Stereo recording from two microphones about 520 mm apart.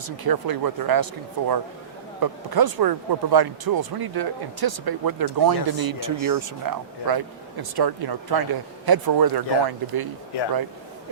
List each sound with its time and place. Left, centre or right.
0.3 s speech: right